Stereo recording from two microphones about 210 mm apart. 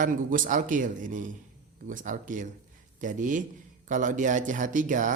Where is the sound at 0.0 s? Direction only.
40° right (ahead or behind).